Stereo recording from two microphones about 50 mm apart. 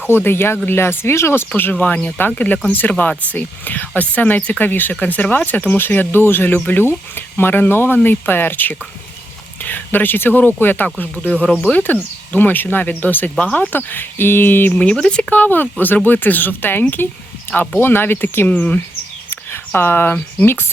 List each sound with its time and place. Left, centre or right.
0.1 s speech: left
1.8 s speech: left
11.2 s speech: left
13.4 s speech: left
14.7 s speech: left
15.3 s speech: left
19.3 s a sound: left
20.4 s speech: left